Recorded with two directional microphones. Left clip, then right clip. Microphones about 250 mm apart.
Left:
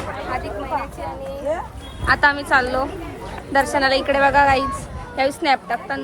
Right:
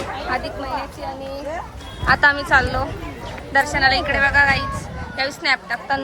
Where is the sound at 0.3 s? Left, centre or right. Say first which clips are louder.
Right 3 dB; right.